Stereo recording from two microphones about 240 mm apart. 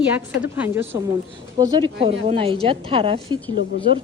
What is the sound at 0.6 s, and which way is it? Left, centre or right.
Speech, centre.